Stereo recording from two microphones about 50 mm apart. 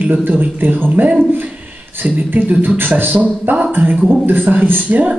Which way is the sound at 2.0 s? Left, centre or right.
Right.